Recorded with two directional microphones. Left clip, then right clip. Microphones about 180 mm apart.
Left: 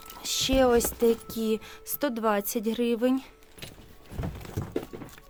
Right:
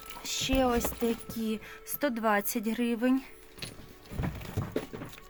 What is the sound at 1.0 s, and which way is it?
A woman's voice, 45° left (ahead or behind).